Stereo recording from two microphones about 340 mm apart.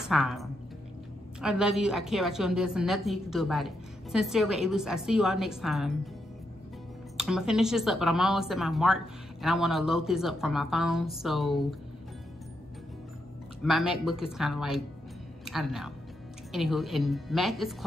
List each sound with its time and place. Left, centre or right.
0.1 s a woman's voice: centre
7.2 s a woman's voice: centre
13.7 s a woman's voice: centre